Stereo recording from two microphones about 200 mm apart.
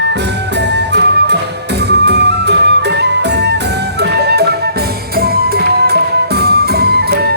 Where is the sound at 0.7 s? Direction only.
60° right (ahead or behind).